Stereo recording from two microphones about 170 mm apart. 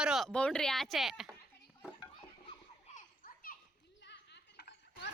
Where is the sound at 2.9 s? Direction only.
50° left (ahead or behind).